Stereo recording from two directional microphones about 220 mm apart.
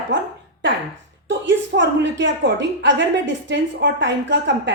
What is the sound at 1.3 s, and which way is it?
A woman's voice, 55° right (ahead or behind).